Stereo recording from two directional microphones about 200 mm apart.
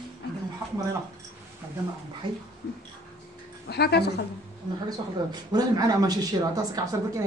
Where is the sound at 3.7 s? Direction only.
55° left (ahead or behind).